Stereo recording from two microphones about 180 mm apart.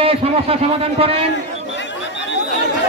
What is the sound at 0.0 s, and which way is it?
Speech, 30° right (ahead or behind).